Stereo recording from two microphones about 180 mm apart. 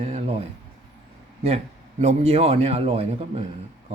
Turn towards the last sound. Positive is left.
turn(degrees=-35)  # may be behind; listen again after turning